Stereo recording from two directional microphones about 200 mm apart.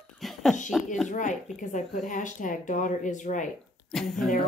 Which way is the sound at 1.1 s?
40° left (ahead or behind).